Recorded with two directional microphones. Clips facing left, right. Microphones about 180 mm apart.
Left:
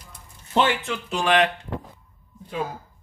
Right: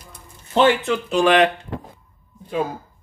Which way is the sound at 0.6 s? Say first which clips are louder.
Right 8 dB; 35° right (ahead or behind).